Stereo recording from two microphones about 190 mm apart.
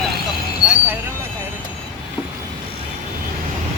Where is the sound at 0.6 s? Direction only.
5° right (ahead or behind).